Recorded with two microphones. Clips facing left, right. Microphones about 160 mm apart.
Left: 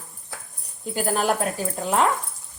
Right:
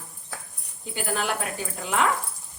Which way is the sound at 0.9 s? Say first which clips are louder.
Left 5 dB; 40° left (ahead or behind).